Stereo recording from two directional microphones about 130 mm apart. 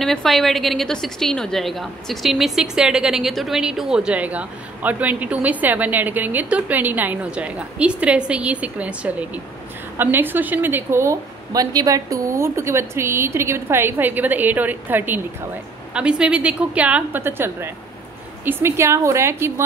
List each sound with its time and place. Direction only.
0.0 s a woman's voice: centre (ahead or behind); by 19.6 s 20° right (ahead or behind)